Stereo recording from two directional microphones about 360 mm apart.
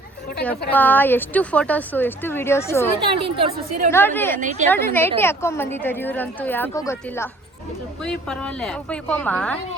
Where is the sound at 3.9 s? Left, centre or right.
Centre.